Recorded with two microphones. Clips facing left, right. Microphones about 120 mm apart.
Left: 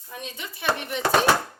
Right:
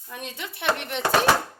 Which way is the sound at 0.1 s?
60° right (ahead or behind).